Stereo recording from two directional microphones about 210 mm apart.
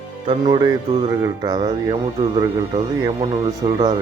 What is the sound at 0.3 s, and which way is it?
Speech, 20° right (ahead or behind).